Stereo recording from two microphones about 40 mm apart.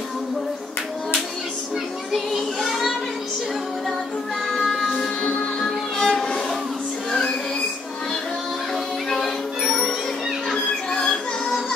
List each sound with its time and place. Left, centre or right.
2.6 s children playing: centre
4.9 s music: centre
10.5 s music: left